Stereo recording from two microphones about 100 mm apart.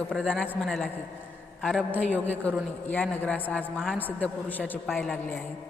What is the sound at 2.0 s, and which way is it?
A woman's voice, 15° left (ahead or behind).